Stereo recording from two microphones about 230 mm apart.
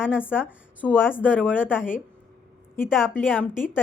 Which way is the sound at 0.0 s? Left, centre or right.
Centre.